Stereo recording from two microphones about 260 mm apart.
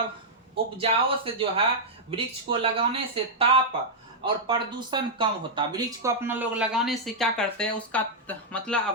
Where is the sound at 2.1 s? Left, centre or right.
Right.